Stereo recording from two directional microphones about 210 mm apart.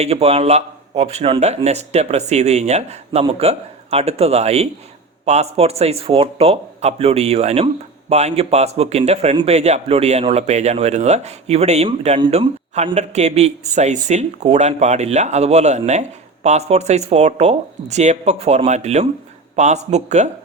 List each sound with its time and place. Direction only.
0.0 s a man's voice: 30° right (ahead or behind)